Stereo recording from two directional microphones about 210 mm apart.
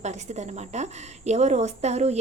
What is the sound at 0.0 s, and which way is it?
A woman's voice, 35° right (ahead or behind).